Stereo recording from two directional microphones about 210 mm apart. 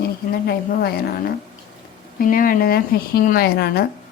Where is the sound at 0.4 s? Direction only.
45° left (ahead or behind).